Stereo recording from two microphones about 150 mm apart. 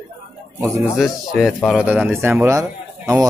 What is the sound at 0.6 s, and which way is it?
Speech, 15° right (ahead or behind).